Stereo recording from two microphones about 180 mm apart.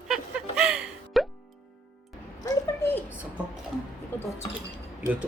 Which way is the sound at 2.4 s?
15° left (ahead or behind).